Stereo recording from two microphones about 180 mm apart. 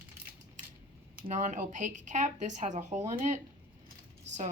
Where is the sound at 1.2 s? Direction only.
40° right (ahead or behind).